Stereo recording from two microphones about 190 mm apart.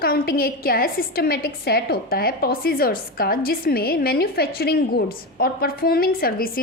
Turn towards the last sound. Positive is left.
turn(degrees=50)  # may be behind; listen again after turning